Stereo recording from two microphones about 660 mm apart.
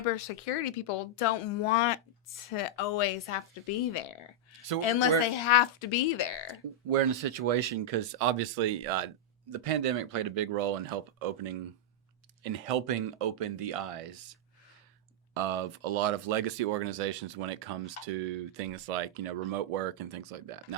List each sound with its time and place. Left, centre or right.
0.4 s speech: left
4.8 s speech: left
6.9 s speech: right